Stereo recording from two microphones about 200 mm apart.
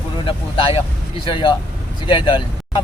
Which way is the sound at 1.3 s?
25° left (ahead or behind).